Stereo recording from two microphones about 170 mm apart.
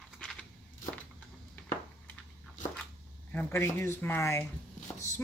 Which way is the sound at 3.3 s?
15° left (ahead or behind).